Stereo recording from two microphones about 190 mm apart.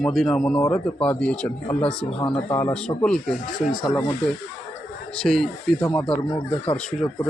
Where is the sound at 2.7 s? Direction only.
5° left (ahead or behind).